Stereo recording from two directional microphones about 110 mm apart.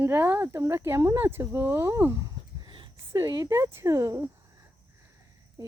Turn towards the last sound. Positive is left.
turn(degrees=-25)  # may be behind; listen again after turning